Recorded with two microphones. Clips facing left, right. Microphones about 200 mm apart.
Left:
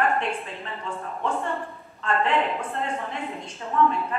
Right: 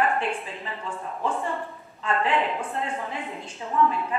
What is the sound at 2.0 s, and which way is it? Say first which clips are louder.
A woman's voice: left 1 dB; centre (ahead or behind).